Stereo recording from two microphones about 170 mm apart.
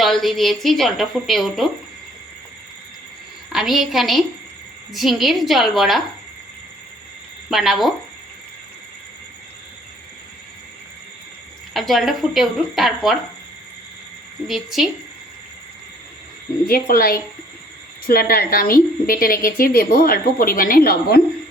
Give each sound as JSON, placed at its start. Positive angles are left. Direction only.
{"t": 0.0, "sound": "a woman's voice", "side_deg": 0}
{"t": 3.5, "sound": "a woman's voice", "side_deg": 0}
{"t": 7.5, "sound": "a woman's voice", "side_deg": 0}
{"t": 11.7, "sound": "a woman's voice", "side_deg": 0}
{"t": 14.4, "sound": "a woman's voice", "side_deg": 0}
{"t": 16.6, "sound": "a woman's voice", "side_deg": 60}